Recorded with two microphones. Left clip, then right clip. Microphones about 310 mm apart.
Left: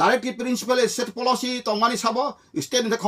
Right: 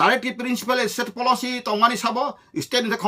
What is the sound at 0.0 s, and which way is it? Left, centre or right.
Speech, centre.